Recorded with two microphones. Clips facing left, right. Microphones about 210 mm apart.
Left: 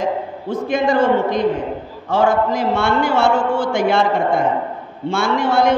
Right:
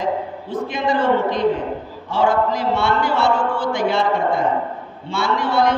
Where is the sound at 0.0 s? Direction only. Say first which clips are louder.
Left 1 dB; 45° left (ahead or behind).